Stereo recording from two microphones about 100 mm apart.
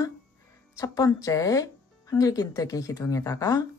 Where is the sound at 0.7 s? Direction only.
35° left (ahead or behind).